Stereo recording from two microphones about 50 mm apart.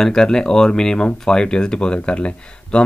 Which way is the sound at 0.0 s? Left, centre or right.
Centre.